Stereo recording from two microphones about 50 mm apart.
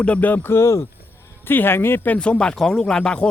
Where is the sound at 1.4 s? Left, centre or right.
Left.